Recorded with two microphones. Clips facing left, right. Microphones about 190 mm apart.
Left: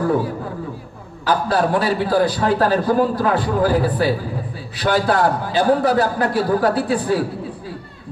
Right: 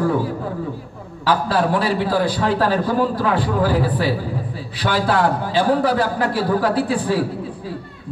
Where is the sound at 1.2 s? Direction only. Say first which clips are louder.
Even; 45° left (ahead or behind).